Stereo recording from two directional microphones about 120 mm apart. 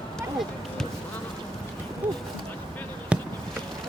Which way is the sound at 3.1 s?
10° right (ahead or behind).